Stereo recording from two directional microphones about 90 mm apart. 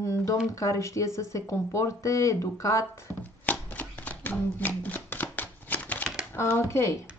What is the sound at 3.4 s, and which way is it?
Shuffling cards, 20° left (ahead or behind).